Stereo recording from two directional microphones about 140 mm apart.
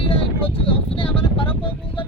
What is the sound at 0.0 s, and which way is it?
Vehicle, 40° left (ahead or behind).